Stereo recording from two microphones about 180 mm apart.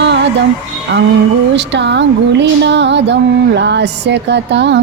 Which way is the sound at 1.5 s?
75° right (ahead or behind).